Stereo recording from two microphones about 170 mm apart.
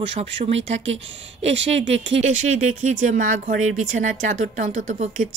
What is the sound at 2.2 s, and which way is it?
Speech, 45° right (ahead or behind).